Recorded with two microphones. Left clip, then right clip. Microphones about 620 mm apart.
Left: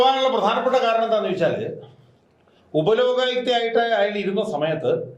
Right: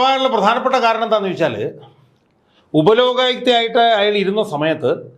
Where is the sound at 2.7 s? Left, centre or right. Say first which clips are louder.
Right 6 dB; right.